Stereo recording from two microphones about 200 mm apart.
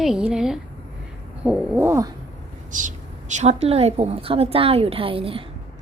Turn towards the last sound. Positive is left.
turn(degrees=-25)  # may be behind; listen again after turning